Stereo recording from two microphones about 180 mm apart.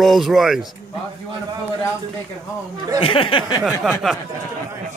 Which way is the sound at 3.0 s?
30° left (ahead or behind).